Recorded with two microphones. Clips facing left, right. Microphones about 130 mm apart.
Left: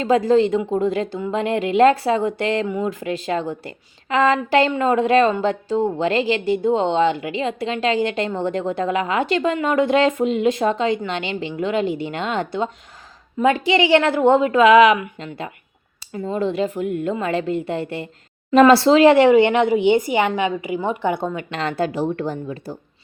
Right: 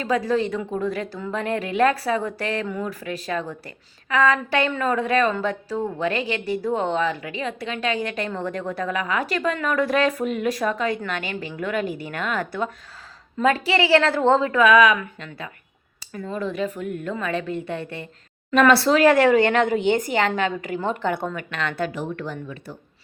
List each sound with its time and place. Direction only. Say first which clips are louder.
0.3 s a woman's voice: left 7 dB; 25° left (ahead or behind)